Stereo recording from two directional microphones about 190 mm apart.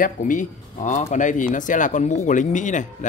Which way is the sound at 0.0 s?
45° left (ahead or behind).